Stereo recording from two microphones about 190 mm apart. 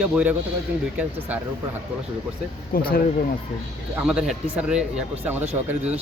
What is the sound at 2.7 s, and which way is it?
Speech, 50° left (ahead or behind).